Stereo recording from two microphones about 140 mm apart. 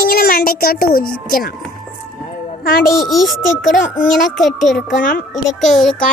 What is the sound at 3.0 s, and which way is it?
A child's voice, centre (ahead or behind).